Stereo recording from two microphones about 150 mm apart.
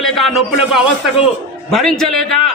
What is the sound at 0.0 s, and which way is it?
A man's voice, centre (ahead or behind).